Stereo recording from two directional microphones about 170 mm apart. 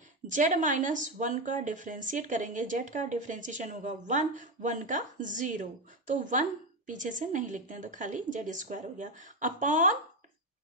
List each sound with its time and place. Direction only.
0.3 s a woman's voice: 50° right (ahead or behind)